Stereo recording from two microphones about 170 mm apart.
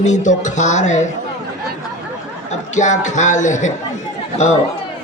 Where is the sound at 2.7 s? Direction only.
45° left (ahead or behind).